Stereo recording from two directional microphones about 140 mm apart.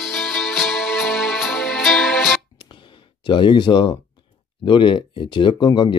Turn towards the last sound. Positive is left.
turn(degrees=35)  # may be behind; listen again after turning